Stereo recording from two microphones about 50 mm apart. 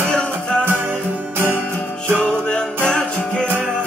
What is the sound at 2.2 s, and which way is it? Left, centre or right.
Music, centre.